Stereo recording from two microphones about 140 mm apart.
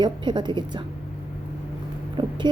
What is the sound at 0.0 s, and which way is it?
Speech, 30° right (ahead or behind).